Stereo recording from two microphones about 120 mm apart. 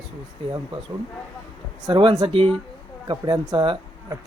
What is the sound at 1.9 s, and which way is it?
Speech, 45° right (ahead or behind).